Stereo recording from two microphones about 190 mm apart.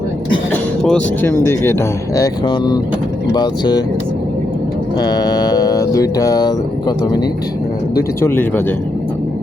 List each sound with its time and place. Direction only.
0.5 s speech: 5° left (ahead or behind); by 3.8 s 20° left (ahead or behind)
4.9 s speech: 20° left (ahead or behind)